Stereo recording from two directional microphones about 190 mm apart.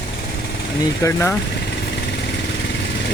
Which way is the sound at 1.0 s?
10° left (ahead or behind).